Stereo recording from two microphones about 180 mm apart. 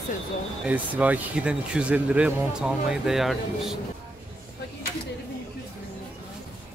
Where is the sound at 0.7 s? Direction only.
10° right (ahead or behind).